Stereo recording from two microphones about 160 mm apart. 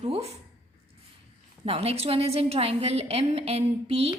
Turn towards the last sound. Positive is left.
turn(degrees=-40)  # may be behind; listen again after turning